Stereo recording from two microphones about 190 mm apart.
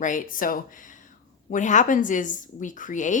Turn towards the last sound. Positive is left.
turn(degrees=40)  # may be behind; listen again after turning